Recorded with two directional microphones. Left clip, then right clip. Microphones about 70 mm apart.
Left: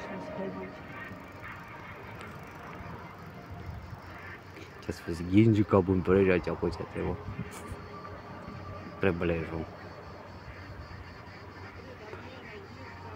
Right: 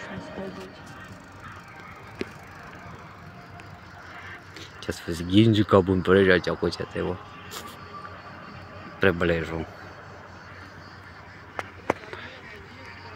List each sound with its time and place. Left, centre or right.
4.8 s speech: right
5.9 s speech: right
6.2 s speech: right
9.0 s a man's voice: right